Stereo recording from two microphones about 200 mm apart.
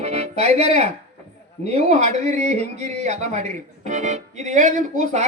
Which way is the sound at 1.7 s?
35° right (ahead or behind).